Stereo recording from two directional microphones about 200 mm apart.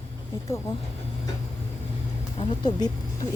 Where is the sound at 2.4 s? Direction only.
20° left (ahead or behind).